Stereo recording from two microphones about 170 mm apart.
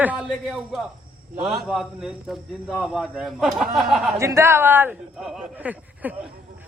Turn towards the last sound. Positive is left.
turn(degrees=-10)  # may be behind; listen again after turning